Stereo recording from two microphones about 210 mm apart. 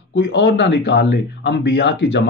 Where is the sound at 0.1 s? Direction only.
60° left (ahead or behind).